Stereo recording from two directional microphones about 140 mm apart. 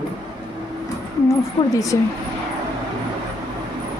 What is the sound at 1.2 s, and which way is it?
Speech, 25° left (ahead or behind).